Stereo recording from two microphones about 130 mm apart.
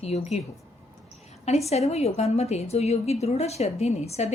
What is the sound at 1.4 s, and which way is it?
A woman's voice, 55° left (ahead or behind).